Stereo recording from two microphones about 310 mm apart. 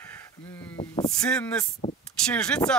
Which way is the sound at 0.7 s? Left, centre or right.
Centre.